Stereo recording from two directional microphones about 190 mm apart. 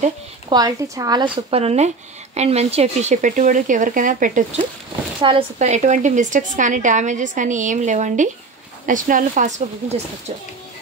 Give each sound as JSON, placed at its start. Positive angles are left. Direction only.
{"t": 0.5, "sound": "a woman's voice", "side_deg": -20}
{"t": 5.2, "sound": "speech", "side_deg": -25}
{"t": 5.7, "sound": "a woman's voice", "side_deg": -40}